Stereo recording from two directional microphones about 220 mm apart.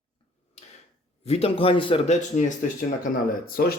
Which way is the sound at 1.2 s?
25° left (ahead or behind).